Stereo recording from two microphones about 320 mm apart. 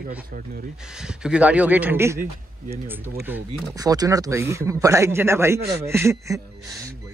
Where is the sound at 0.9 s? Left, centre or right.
Centre.